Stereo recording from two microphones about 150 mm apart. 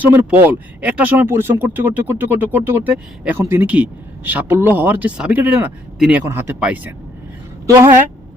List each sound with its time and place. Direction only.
0.0 s speech: 10° right (ahead or behind)